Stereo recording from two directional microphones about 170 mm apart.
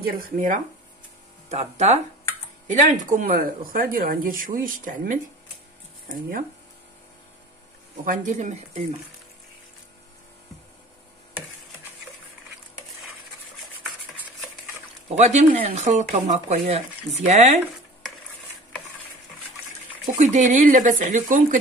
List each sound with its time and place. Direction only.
0.0 s speech: 55° right (ahead or behind)
1.5 s speech: 40° right (ahead or behind)
2.7 s speech: 50° right (ahead or behind)
8.0 s speech: 50° right (ahead or behind)
15.1 s speech: 45° right (ahead or behind)
20.2 s speech: 45° right (ahead or behind)